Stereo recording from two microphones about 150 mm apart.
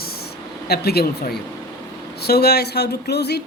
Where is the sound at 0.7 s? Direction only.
90° left.